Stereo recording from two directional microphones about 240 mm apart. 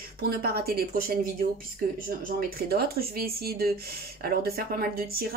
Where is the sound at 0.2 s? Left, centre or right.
Right.